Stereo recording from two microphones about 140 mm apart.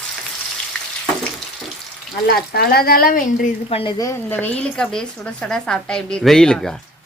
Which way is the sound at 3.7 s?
40° left (ahead or behind).